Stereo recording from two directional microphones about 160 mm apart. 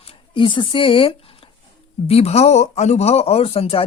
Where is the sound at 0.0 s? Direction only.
35° left (ahead or behind).